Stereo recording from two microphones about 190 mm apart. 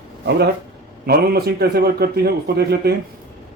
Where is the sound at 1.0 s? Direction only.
55° right (ahead or behind).